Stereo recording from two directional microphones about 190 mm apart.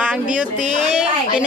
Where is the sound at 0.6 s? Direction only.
40° right (ahead or behind).